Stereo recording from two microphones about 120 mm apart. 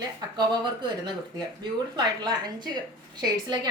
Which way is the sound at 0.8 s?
35° right (ahead or behind).